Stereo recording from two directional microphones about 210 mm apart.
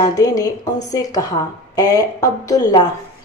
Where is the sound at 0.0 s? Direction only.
15° left (ahead or behind).